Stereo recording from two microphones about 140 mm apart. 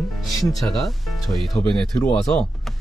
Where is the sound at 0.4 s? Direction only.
Centre (ahead or behind).